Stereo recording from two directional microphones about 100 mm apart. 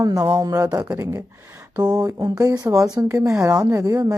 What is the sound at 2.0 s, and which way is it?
Speech, 40° right (ahead or behind).